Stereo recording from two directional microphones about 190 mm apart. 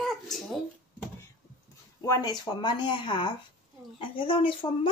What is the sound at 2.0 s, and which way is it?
Speech, 20° left (ahead or behind).